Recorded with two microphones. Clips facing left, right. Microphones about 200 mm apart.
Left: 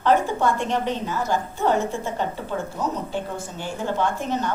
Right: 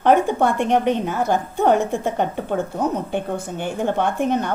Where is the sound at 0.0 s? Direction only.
60° right (ahead or behind).